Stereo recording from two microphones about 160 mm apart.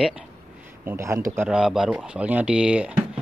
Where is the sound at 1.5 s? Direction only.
Centre (ahead or behind).